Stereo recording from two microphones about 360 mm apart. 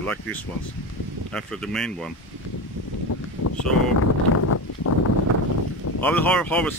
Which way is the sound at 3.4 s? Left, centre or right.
Left.